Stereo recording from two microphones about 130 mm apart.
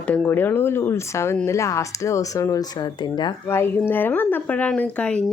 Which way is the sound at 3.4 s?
20° left (ahead or behind).